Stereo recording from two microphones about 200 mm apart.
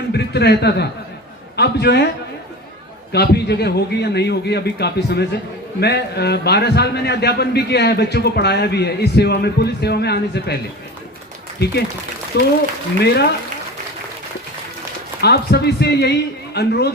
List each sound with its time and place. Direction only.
0.1 s a man's voice: 55° left (ahead or behind)
12.3 s a man's voice: 55° left (ahead or behind)
15.2 s speech: 55° left (ahead or behind)